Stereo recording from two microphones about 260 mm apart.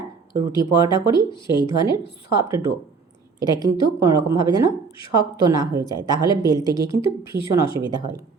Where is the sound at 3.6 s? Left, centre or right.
Centre.